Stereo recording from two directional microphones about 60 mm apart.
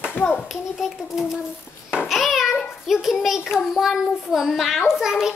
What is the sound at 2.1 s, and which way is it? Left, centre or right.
Child singing, centre.